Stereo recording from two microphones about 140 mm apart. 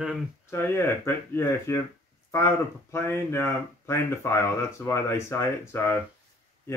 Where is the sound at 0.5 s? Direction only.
20° left (ahead or behind).